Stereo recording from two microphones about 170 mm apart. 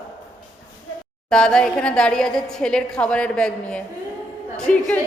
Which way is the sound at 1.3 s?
5° left (ahead or behind).